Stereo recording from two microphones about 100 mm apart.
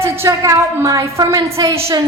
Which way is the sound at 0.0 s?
30° right (ahead or behind).